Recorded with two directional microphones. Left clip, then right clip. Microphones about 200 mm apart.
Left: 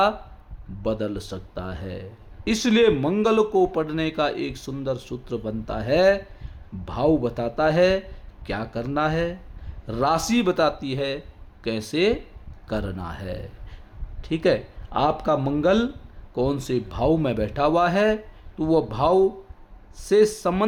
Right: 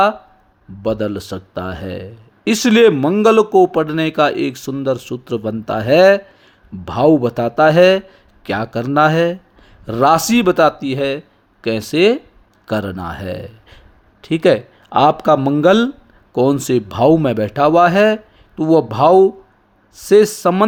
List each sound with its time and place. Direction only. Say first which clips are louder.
0.8 s a man's voice: right 7 dB; 30° right (ahead or behind)